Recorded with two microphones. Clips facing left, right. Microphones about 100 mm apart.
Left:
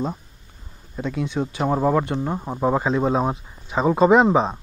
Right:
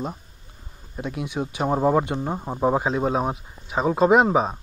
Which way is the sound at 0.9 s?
15° right (ahead or behind).